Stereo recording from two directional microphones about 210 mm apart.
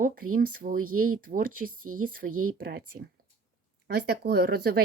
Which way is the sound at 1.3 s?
40° right (ahead or behind).